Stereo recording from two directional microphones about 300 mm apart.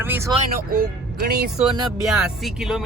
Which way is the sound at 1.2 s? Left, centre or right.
Right.